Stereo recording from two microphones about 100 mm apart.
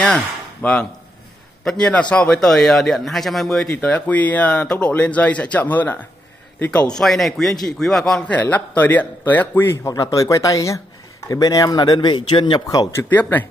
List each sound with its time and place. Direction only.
0.0 s a man's voice: 10° left (ahead or behind)
3.7 s a man's voice: 15° left (ahead or behind)
9.9 s speech: 35° left (ahead or behind); by 12.6 s 50° left (ahead or behind)
12.6 s speech: 35° left (ahead or behind)
13.1 s a man's voice: 15° left (ahead or behind)